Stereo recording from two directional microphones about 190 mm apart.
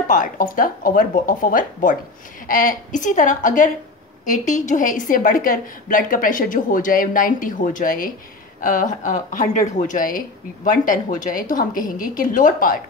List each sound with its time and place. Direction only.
0.1 s speech: 45° left (ahead or behind)